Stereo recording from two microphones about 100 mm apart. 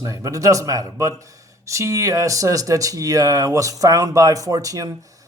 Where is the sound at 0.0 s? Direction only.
30° right (ahead or behind).